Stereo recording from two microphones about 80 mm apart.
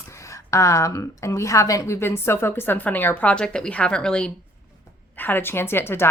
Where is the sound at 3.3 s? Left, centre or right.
Centre.